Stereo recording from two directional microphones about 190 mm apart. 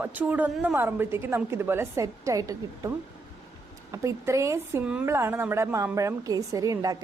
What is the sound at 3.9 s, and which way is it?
A woman's voice, 15° right (ahead or behind).